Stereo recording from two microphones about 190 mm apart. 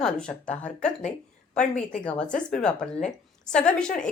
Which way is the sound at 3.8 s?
45° left (ahead or behind).